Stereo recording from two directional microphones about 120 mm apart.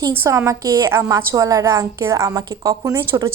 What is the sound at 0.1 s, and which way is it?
A woman's voice, 20° right (ahead or behind).